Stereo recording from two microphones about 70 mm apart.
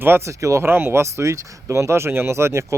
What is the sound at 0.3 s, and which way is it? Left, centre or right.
Speech, right.